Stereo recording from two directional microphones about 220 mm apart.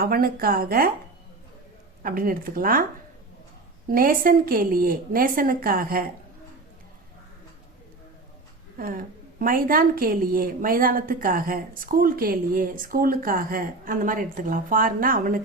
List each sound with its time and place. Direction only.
0.0 s a woman's voice: 40° right (ahead or behind)
2.0 s a woman's voice: 40° right (ahead or behind)
3.8 s a woman's voice: 40° right (ahead or behind)
8.8 s a woman's voice: 40° right (ahead or behind)